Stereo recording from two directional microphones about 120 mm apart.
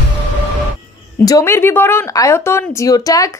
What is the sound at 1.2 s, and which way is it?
A woman's voice, 25° left (ahead or behind).